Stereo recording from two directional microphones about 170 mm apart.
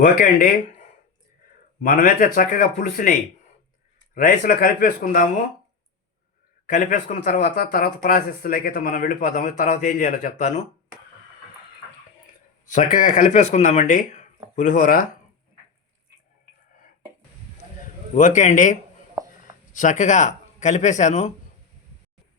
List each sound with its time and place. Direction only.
0.0 s speech: 55° left (ahead or behind)
6.7 s speech: 50° left (ahead or behind)
12.7 s speech: 45° left (ahead or behind)
18.1 s speech: 45° left (ahead or behind)
19.2 s a sound: 20° right (ahead or behind)
19.7 s speech: 45° left (ahead or behind)